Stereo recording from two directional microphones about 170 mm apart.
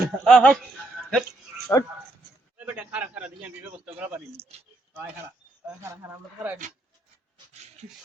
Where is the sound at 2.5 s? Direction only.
10° right (ahead or behind).